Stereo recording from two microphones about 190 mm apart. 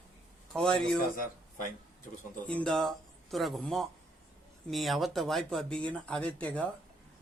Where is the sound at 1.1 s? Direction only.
50° left (ahead or behind).